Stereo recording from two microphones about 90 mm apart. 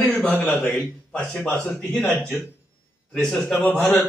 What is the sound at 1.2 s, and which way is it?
Mantra, 5° left (ahead or behind).